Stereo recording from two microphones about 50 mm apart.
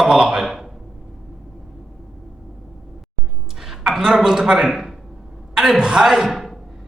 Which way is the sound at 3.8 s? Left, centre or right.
Centre.